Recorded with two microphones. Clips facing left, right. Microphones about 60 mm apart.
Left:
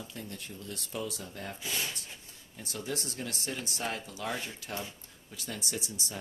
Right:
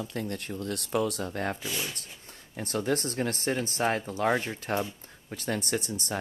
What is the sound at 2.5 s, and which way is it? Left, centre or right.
Speech, right.